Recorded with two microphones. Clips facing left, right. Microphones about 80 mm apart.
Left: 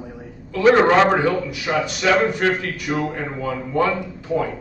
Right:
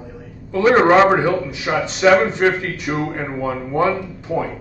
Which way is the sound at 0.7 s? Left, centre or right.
Right.